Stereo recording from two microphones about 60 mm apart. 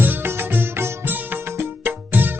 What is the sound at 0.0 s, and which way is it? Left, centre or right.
Music, right.